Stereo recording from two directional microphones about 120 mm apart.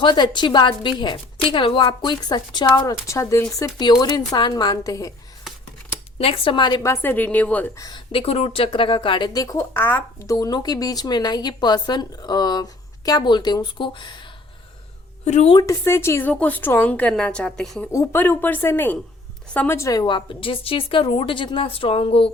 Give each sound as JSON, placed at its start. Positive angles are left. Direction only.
{"t": 0.0, "sound": "speech", "side_deg": 40}
{"t": 3.1, "sound": "speech", "side_deg": 25}
{"t": 6.1, "sound": "a woman's voice", "side_deg": 50}
{"t": 6.8, "sound": "a woman's voice", "side_deg": 20}
{"t": 7.8, "sound": "speech", "side_deg": 35}
{"t": 8.1, "sound": "a woman's voice", "side_deg": 55}
{"t": 9.7, "sound": "a woman's voice", "side_deg": 15}
{"t": 10.3, "sound": "speech", "side_deg": 35}
{"t": 15.2, "sound": "a woman's voice", "side_deg": 70}
{"t": 15.5, "sound": "a woman's voice", "side_deg": 25}
{"t": 17.9, "sound": "speech", "side_deg": 30}
{"t": 18.2, "sound": "a woman's voice", "side_deg": 15}
{"t": 19.9, "sound": "a woman's voice", "side_deg": 35}